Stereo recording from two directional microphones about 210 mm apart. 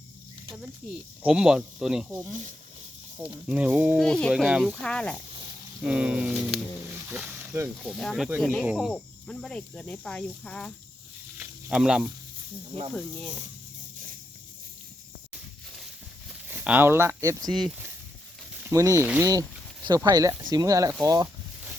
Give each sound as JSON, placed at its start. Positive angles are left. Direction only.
{"t": 1.2, "sound": "speech", "side_deg": -5}
{"t": 3.4, "sound": "speech", "side_deg": -5}
{"t": 4.0, "sound": "speech", "side_deg": 5}
{"t": 7.9, "sound": "speech", "side_deg": 0}
{"t": 11.3, "sound": "snake", "side_deg": -5}
{"t": 16.5, "sound": "speech", "side_deg": -10}
{"t": 17.7, "sound": "speech", "side_deg": -5}
{"t": 21.0, "sound": "a sound", "side_deg": -15}